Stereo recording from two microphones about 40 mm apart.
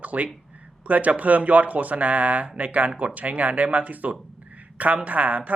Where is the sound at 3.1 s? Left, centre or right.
Right.